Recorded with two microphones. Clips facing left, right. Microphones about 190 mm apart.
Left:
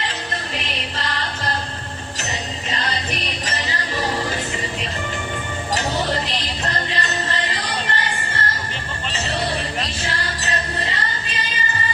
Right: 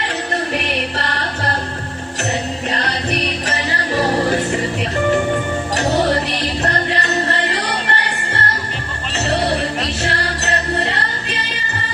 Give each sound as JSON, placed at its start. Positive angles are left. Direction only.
{"t": 0.5, "sound": "music", "side_deg": -65}
{"t": 2.6, "sound": "music", "side_deg": -60}